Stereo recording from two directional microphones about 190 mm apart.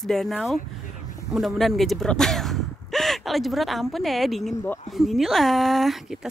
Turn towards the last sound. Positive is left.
turn(degrees=0)  # may be behind; listen again after turning